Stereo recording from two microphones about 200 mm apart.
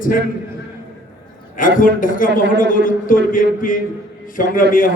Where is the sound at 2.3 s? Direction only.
60° right (ahead or behind).